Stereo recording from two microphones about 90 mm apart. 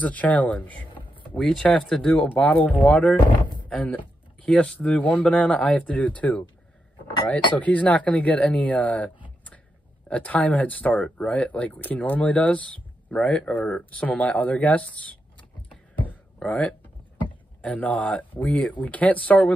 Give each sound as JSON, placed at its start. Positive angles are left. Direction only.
{"t": 0.0, "sound": "speech", "side_deg": 15}
{"t": 7.5, "sound": "speech", "side_deg": 15}
{"t": 16.0, "sound": "a sound", "side_deg": 15}
{"t": 17.6, "sound": "speech", "side_deg": 15}